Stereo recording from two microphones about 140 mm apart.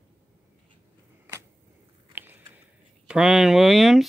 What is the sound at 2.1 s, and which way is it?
Biting, 15° right (ahead or behind).